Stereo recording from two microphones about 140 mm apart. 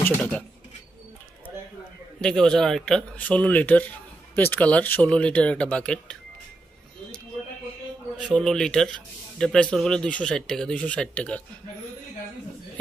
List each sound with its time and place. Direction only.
0.2 s speech: 5° left (ahead or behind)
2.2 s a man's voice: 5° left (ahead or behind)
8.3 s speech: 5° left (ahead or behind)